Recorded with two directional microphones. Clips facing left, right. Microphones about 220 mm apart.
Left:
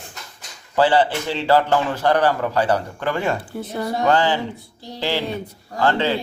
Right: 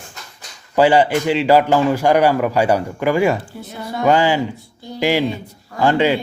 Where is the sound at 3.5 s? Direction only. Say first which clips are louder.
Left 4 dB; 50° left (ahead or behind).